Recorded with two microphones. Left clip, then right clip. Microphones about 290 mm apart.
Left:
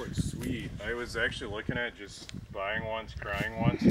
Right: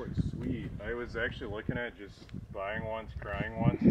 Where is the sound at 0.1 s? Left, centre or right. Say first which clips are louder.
Left 2 dB; centre.